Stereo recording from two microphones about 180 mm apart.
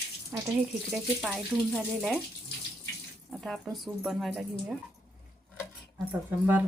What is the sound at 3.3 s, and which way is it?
Speech, centre (ahead or behind).